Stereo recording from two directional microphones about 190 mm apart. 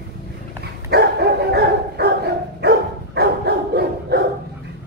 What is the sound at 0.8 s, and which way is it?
Dog, 60° right (ahead or behind).